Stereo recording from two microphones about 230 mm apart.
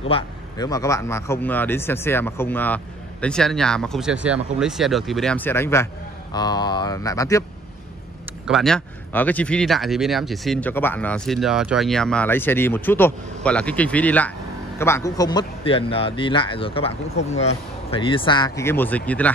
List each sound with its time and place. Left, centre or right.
0.1 s speech: centre
8.5 s a man's voice: centre; by 16.9 s left
17.9 s speech: left; by 19.3 s centre